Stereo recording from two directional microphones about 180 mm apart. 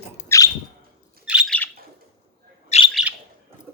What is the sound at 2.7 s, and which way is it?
Bird, 40° left (ahead or behind).